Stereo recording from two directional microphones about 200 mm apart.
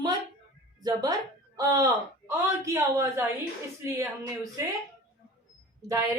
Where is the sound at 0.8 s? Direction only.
20° right (ahead or behind).